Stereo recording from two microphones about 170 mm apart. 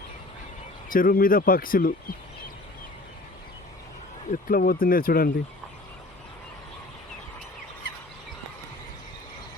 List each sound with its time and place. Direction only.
0.9 s speech: 55° left (ahead or behind)
4.3 s speech: 55° left (ahead or behind)